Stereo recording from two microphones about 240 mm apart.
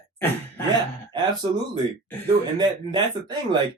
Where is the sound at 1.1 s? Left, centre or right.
Centre.